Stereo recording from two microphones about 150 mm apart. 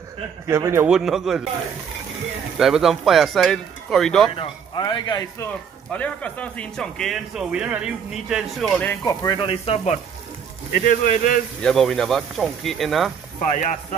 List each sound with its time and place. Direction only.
0.5 s a man's voice: 20° right (ahead or behind)
0.8 s speech: 5° right (ahead or behind)
2.5 s speech: 5° right (ahead or behind)
4.4 s a man's voice: 30° left (ahead or behind)
5.9 s speech: 10° left (ahead or behind)
8.8 s a man's voice: 25° left (ahead or behind)
10.7 s speech: 60° left (ahead or behind)
11.6 s speech: 5° left (ahead or behind)
13.5 s speech: 50° left (ahead or behind)